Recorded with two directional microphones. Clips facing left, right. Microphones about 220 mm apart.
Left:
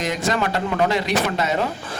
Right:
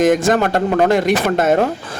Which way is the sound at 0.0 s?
50° right (ahead or behind).